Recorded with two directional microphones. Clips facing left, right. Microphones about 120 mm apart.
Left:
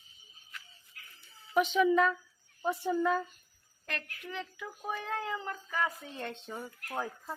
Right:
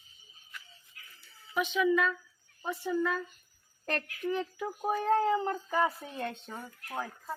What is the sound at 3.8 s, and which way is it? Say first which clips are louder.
Speech: right 9 dB; 40° right (ahead or behind).